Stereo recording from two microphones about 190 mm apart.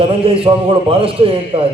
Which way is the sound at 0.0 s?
30° right (ahead or behind).